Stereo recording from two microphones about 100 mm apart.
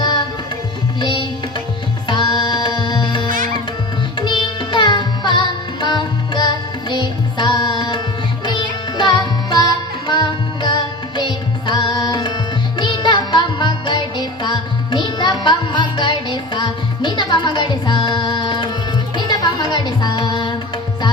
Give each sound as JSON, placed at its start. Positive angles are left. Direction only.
{"t": 2.0, "sound": "music", "side_deg": 50}
{"t": 4.2, "sound": "carnatic music", "side_deg": 50}
{"t": 8.5, "sound": "music", "side_deg": 50}
{"t": 11.9, "sound": "tabla", "side_deg": 40}
{"t": 12.7, "sound": "music", "side_deg": 50}